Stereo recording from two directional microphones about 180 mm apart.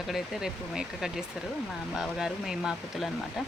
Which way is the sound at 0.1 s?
Centre (ahead or behind).